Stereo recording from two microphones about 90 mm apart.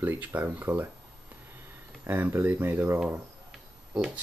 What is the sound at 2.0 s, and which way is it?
Speech, 25° right (ahead or behind).